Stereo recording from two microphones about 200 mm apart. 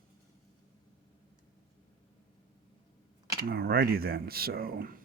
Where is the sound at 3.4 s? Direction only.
50° right (ahead or behind).